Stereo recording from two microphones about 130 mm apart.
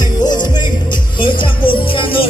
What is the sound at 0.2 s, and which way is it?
Music, 35° left (ahead or behind).